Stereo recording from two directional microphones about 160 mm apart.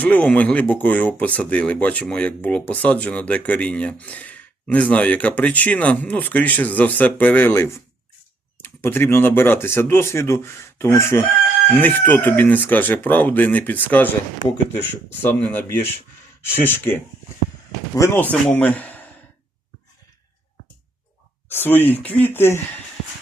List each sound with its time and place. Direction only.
0.0 s speech: 10° left (ahead or behind)
15.2 s speech: 10° left (ahead or behind)
21.5 s speech: 10° left (ahead or behind)